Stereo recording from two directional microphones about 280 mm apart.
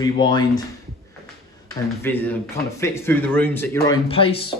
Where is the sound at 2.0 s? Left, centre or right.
Centre.